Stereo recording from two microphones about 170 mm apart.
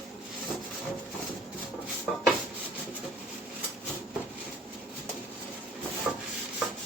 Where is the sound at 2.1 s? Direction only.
Centre (ahead or behind).